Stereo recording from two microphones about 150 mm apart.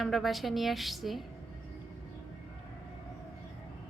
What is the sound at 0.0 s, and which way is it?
A woman's voice, centre (ahead or behind).